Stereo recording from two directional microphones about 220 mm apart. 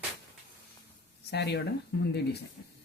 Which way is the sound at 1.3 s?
50° left (ahead or behind).